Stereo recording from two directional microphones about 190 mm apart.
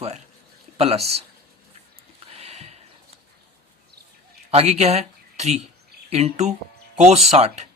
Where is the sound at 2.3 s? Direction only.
30° right (ahead or behind).